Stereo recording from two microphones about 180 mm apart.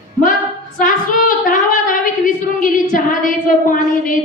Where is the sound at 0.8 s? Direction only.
50° left (ahead or behind).